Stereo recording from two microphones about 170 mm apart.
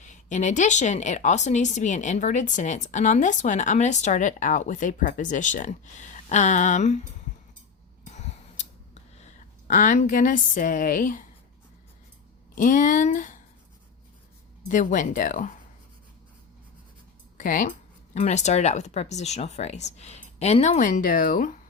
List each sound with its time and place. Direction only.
0.0 s speech: 45° left (ahead or behind)
8.0 s a sound: 45° left (ahead or behind)
9.2 s a woman's voice: 45° left (ahead or behind)
12.5 s speech: 50° left (ahead or behind)
14.7 s speech: 50° left (ahead or behind)
17.3 s speech: 55° left (ahead or behind)